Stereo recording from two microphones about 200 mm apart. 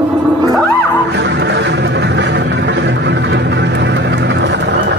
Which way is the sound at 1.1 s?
55° right (ahead or behind).